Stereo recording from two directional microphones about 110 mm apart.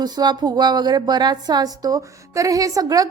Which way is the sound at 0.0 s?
40° right (ahead or behind).